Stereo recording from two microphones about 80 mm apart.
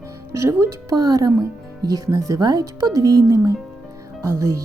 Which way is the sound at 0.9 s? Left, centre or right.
Right.